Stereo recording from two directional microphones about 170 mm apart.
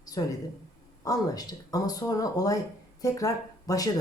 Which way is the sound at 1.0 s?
20° left (ahead or behind).